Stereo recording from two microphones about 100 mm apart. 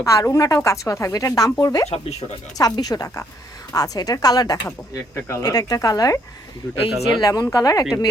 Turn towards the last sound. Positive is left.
turn(degrees=40)  # may be behind; listen again after turning